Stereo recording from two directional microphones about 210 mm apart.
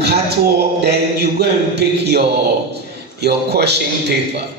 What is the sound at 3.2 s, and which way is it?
Speech, 50° right (ahead or behind).